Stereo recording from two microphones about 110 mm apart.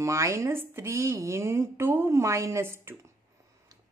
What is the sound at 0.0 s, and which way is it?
A woman's voice, 25° right (ahead or behind).